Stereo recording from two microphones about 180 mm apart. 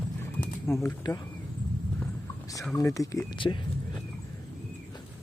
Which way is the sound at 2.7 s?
20° left (ahead or behind).